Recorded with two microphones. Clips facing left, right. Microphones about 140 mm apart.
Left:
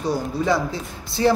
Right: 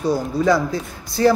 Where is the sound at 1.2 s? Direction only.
20° left (ahead or behind).